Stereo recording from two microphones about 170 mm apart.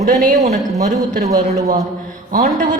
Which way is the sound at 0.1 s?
50° right (ahead or behind).